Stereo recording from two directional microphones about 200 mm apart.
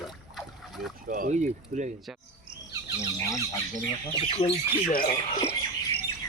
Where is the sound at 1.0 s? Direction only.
45° right (ahead or behind).